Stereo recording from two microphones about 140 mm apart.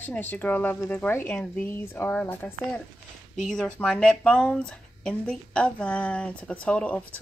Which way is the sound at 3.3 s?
5° left (ahead or behind).